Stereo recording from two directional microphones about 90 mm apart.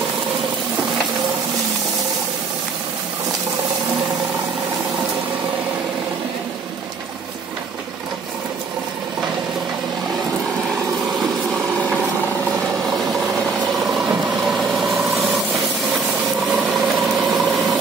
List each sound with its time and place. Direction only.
13.7 s vehicle: 5° right (ahead or behind)
16.5 s engine: centre (ahead or behind)
17.2 s vehicle: 5° right (ahead or behind)